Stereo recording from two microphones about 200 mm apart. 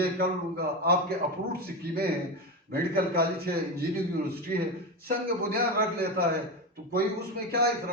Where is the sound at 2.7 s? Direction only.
50° right (ahead or behind).